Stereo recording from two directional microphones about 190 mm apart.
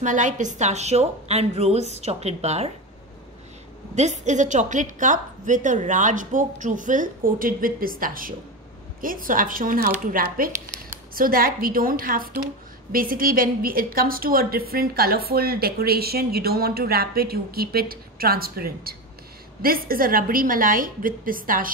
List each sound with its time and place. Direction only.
0.0 s a woman's voice: 40° right (ahead or behind)
3.9 s a woman's voice: 35° right (ahead or behind)